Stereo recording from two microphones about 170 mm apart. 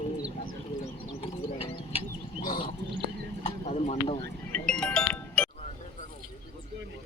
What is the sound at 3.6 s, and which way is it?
Speech, 40° left (ahead or behind).